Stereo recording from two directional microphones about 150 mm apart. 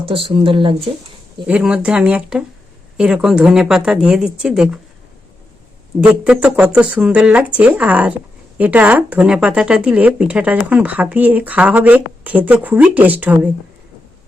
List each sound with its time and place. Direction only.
0.0 s speech: 35° right (ahead or behind)
1.5 s speech: 5° right (ahead or behind)
6.0 s speech: 5° right (ahead or behind)